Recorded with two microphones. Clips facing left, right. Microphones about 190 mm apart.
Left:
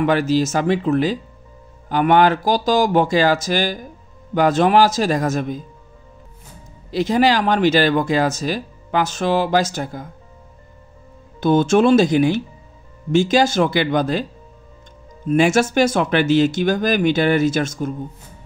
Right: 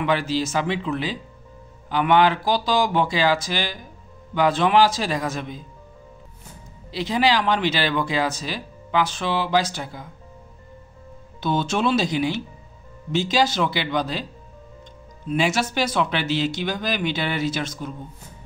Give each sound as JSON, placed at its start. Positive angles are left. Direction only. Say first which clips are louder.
{"t": 0.0, "sound": "speech", "louder": "left 6 dB", "side_deg": 45}
{"t": 6.9, "sound": "speech", "louder": "left 5 dB", "side_deg": 45}
{"t": 11.4, "sound": "speech", "louder": "left 8 dB", "side_deg": 50}
{"t": 15.2, "sound": "speech", "louder": "left 7 dB", "side_deg": 50}